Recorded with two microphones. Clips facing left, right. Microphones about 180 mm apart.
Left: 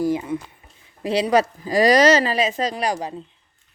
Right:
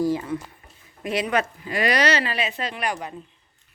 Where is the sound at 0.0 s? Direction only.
15° left (ahead or behind).